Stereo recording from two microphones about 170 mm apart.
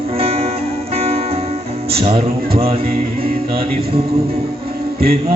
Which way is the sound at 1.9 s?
30° right (ahead or behind).